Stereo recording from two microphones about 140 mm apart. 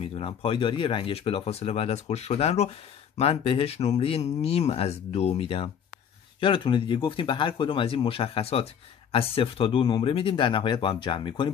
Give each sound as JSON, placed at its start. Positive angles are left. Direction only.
{"t": 0.0, "sound": "speech", "side_deg": 45}